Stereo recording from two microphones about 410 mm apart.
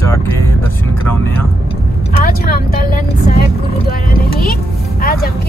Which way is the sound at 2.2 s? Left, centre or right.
Left.